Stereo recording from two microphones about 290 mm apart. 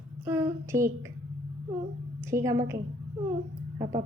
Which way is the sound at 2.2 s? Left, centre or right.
Centre.